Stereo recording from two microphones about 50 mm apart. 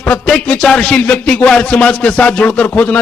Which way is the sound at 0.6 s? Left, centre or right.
Centre.